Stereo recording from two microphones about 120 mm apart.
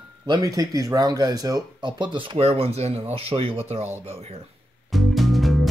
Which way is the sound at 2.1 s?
55° right (ahead or behind).